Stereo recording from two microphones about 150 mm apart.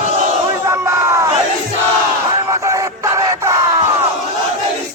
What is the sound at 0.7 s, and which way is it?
Crowd, 20° right (ahead or behind).